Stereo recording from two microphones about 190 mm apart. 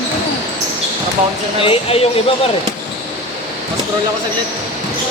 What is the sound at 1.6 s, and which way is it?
Speech, 30° left (ahead or behind).